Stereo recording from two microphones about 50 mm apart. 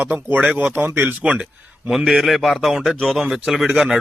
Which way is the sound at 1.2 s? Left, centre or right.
Right.